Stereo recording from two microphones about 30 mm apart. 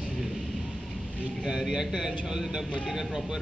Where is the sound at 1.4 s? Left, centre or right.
Centre.